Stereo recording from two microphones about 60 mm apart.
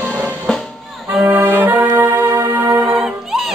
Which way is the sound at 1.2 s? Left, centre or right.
Right.